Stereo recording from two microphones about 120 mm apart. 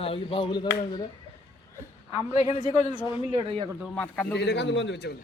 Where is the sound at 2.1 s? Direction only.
60° left (ahead or behind).